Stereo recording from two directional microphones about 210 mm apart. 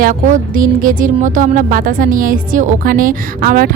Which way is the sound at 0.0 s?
40° right (ahead or behind).